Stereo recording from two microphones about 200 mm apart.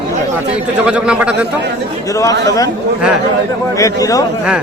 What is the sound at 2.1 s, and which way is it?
Speech, 15° left (ahead or behind).